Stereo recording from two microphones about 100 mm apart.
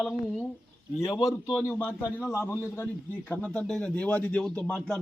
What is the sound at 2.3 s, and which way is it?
A man's voice, 25° left (ahead or behind).